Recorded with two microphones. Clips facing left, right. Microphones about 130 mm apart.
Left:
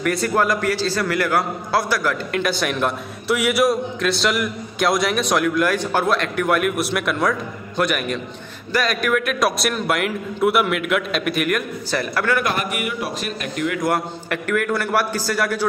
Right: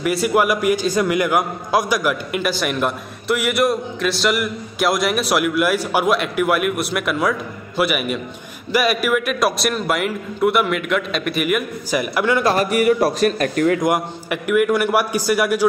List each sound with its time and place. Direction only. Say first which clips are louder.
0.0 s a man's voice: right 2 dB; 5° right (ahead or behind)
12.4 s a man's voice: right 8 dB; 35° right (ahead or behind)
13.7 s a man's voice: right 2 dB; 15° right (ahead or behind)